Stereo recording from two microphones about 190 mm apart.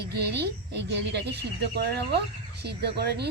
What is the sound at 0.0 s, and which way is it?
Speech, 60° right (ahead or behind).